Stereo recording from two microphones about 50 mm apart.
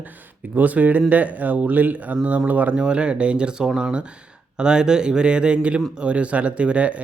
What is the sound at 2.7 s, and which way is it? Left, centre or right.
A man's voice, right.